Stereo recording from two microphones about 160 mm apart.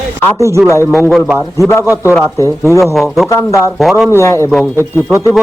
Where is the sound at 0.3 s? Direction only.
20° right (ahead or behind).